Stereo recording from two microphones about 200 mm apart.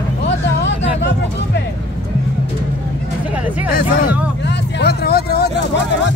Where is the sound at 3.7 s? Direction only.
50° left (ahead or behind).